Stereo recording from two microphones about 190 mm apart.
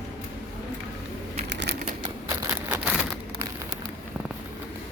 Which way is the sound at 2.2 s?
5° right (ahead or behind).